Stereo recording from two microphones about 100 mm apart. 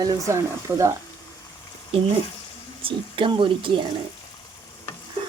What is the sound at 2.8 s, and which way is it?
Speech, 55° right (ahead or behind).